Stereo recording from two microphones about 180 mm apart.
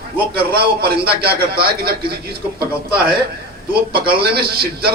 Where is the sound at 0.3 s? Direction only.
60° right (ahead or behind).